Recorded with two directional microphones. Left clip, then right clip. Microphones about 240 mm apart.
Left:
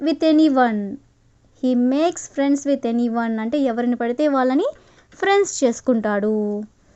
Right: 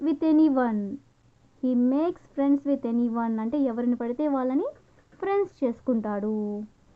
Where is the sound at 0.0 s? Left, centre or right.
Centre.